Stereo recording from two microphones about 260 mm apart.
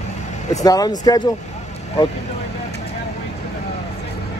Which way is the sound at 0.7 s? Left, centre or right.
Centre.